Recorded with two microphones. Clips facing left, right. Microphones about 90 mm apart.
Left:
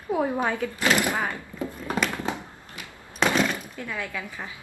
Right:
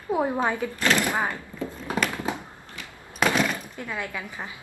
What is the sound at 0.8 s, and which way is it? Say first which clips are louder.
Speech: left 1 dB; 15° left (ahead or behind).